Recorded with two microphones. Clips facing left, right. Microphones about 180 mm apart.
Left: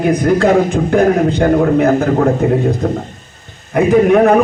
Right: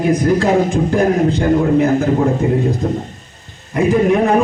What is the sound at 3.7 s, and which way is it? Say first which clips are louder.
Speech: left 4 dB; 65° left (ahead or behind).